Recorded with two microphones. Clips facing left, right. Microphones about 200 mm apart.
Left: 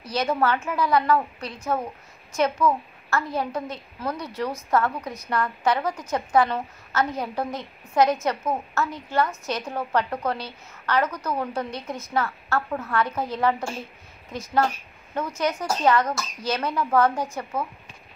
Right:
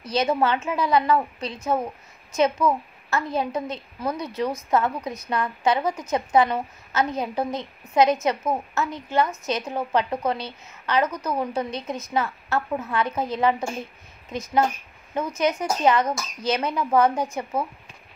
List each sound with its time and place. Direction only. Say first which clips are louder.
0.0 s a woman's voice: right 2 dB; 20° right (ahead or behind)
15.1 s a woman's voice: right 2 dB; 20° right (ahead or behind)